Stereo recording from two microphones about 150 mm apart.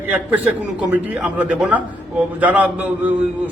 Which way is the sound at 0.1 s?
10° right (ahead or behind).